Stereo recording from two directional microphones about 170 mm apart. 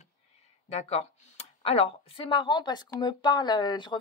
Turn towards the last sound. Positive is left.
turn(degrees=25)  # may be behind; listen again after turning